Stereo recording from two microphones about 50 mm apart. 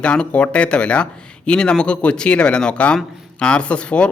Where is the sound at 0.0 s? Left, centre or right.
Left.